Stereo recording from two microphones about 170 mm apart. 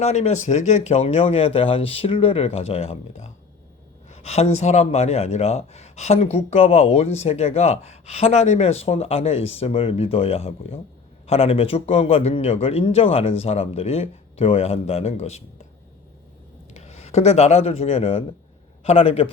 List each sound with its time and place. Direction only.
0.0 s speech: 40° left (ahead or behind)
16.7 s speech: 40° left (ahead or behind)